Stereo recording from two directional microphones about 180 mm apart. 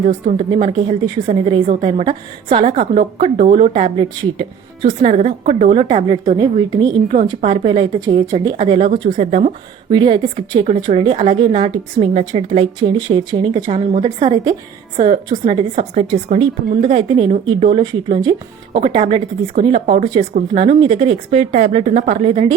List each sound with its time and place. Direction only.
0.0 s a woman's voice: 35° right (ahead or behind)
9.1 s a woman's voice: 40° right (ahead or behind)
9.9 s a woman's voice: 25° right (ahead or behind)